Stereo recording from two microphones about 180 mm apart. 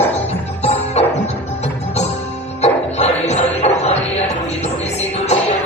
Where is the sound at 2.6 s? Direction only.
40° left (ahead or behind).